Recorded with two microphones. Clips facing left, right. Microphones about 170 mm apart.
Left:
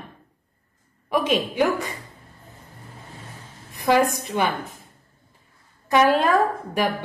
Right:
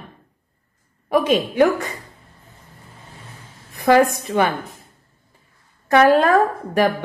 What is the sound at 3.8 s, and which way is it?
Speech, 55° right (ahead or behind).